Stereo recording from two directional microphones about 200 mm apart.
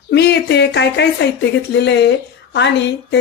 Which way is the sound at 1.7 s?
60° left (ahead or behind).